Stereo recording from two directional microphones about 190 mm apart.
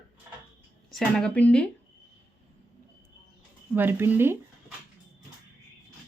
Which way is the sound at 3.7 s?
10° right (ahead or behind).